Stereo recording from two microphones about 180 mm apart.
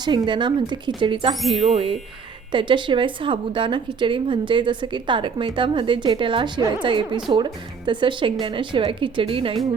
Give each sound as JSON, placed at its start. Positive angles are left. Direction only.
{"t": 0.0, "sound": "a woman's voice", "side_deg": -25}